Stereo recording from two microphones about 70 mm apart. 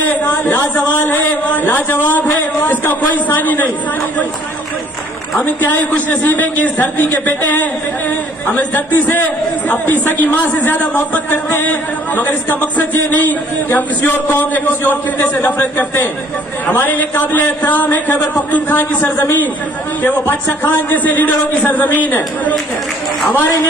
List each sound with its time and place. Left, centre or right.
0.6 s a sound: left
1.5 s speech: left
3.4 s a man's voice: left
5.4 s a man's voice: left